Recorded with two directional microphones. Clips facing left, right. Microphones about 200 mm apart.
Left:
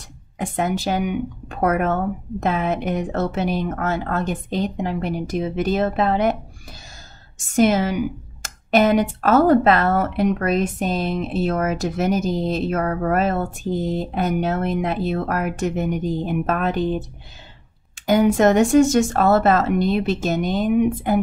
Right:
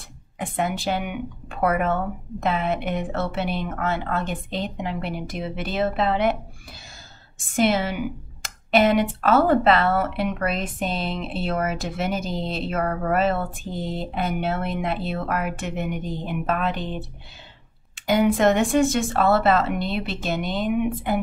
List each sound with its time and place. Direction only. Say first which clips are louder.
0.4 s speech: left 3 dB; 45° left (ahead or behind)
7.5 s speech: left 4 dB; 45° left (ahead or behind)
18.0 s speech: left 3 dB; 45° left (ahead or behind)